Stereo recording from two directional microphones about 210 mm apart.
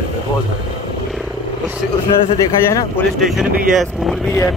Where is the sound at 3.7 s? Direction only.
Centre (ahead or behind).